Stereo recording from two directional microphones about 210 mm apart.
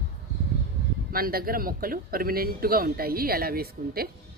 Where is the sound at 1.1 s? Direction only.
45° right (ahead or behind).